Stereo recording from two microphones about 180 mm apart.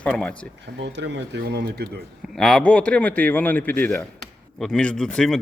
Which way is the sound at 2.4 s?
5° left (ahead or behind).